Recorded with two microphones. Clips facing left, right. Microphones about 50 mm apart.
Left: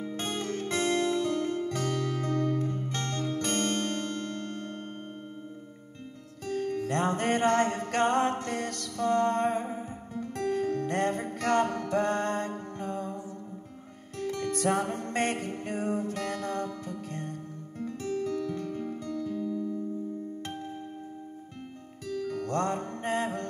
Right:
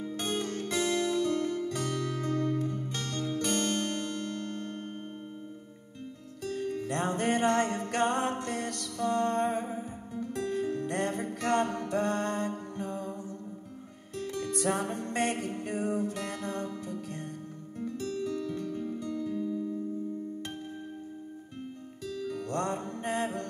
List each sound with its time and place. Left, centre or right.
0.0 s zither: left
6.4 s music: left
19.3 s music: right
22.0 s music: left